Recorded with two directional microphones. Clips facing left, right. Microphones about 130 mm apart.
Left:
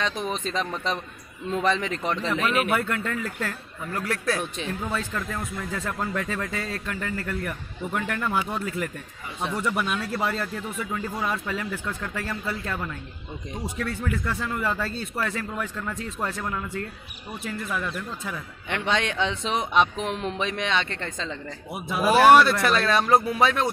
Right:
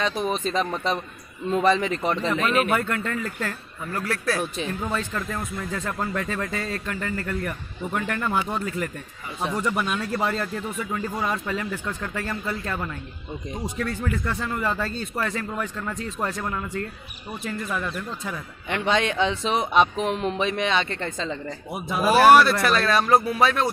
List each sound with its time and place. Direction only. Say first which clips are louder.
0.3 s a man's voice: right 3 dB; 5° right (ahead or behind)
2.2 s speech: right 1 dB; 5° left (ahead or behind)
3.9 s speech: right 1 dB; 20° left (ahead or behind)
4.4 s speech: right 2 dB; 5° right (ahead or behind)
18.3 s speech: right 2 dB; 5° right (ahead or behind)
22.6 s speech: right 1 dB; 20° left (ahead or behind)